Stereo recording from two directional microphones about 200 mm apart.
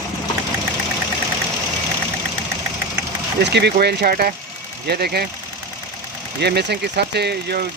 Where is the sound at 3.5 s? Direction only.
55° right (ahead or behind).